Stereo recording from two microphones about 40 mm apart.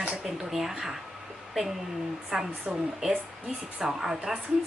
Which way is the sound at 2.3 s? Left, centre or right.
Centre.